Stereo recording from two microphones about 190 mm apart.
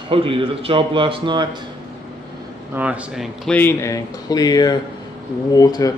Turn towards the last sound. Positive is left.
turn(degrees=20)  # may be behind; listen again after turning